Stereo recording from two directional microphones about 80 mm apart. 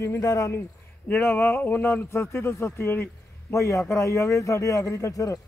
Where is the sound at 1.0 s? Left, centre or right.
Left.